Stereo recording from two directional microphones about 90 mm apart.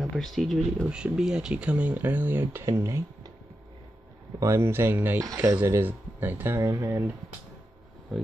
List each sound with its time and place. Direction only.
0.1 s speech: centre (ahead or behind)
0.8 s speech: 10° right (ahead or behind); by 3.0 s 30° right (ahead or behind)
4.4 s speech: 30° right (ahead or behind)
5.2 s speech: 40° right (ahead or behind)
5.7 s speech: 25° right (ahead or behind)
6.6 s speech: 40° right (ahead or behind)
8.1 s speech: centre (ahead or behind)